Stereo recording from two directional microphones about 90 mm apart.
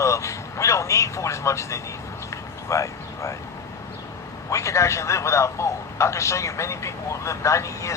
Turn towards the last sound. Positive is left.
turn(degrees=35)  # may be behind; listen again after turning